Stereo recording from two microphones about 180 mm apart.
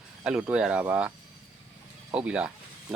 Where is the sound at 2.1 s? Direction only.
5° right (ahead or behind).